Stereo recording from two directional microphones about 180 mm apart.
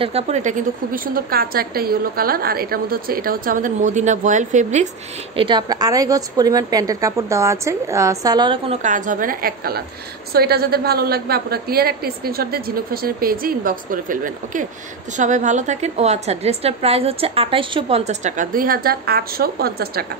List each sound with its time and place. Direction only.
0.0 s a woman's voice: 35° right (ahead or behind)
5.3 s a woman's voice: 25° right (ahead or behind)
8.8 s a woman's voice: 45° right (ahead or behind)